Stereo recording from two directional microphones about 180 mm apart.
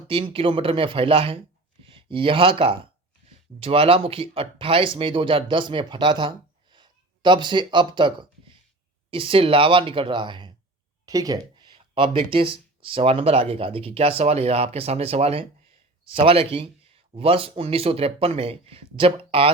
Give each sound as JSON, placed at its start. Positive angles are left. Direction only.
{"t": 0.1, "sound": "speech", "side_deg": -30}
{"t": 6.7, "sound": "a sound", "side_deg": -25}
{"t": 9.0, "sound": "speech", "side_deg": -30}